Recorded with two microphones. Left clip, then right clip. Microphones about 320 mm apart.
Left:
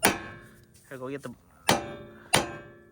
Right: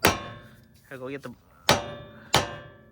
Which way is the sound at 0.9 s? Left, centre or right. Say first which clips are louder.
Right 1 dB; centre.